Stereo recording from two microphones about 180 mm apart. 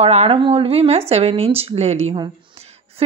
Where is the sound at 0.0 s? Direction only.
35° right (ahead or behind).